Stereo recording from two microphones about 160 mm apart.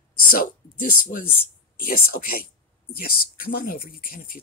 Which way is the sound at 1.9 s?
65° left (ahead or behind).